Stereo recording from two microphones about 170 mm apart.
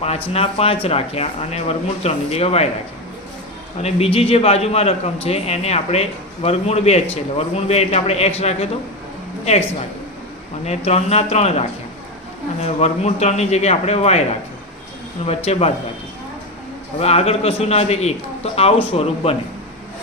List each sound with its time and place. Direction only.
0.3 s a man's voice: 35° left (ahead or behind)
3.8 s a man's voice: 35° left (ahead or behind)
10.7 s a man's voice: 40° left (ahead or behind)
15.4 s a man's voice: 40° left (ahead or behind)
17.0 s a man's voice: 35° left (ahead or behind)